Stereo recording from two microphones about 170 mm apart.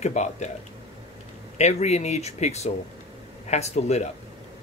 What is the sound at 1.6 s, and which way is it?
Speech, 40° left (ahead or behind).